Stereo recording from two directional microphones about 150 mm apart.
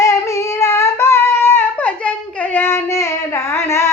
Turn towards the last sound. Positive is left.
turn(degrees=20)  # may be behind; listen again after turning